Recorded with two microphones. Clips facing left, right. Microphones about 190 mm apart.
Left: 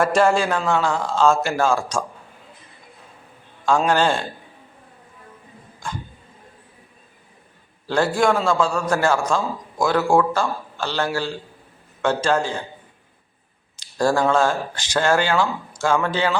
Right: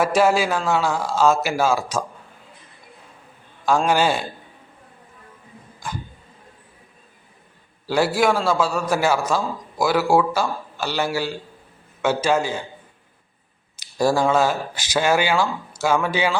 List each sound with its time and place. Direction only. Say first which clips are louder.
0.0 s a man's voice: even; 5° right (ahead or behind)
3.7 s a man's voice: even; 5° right (ahead or behind)
7.9 s a man's voice: even; 10° right (ahead or behind)
14.0 s a man's voice: even; 10° right (ahead or behind)